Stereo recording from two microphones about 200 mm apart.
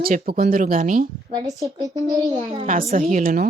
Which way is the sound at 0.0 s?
50° right (ahead or behind).